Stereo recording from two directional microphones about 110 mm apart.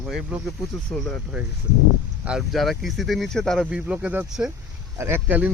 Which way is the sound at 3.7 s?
10° right (ahead or behind).